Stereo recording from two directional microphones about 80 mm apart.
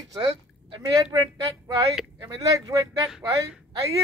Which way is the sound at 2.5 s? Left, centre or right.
Right.